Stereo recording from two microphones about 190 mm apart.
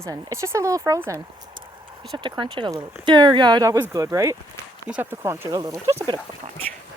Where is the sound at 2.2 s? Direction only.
25° right (ahead or behind).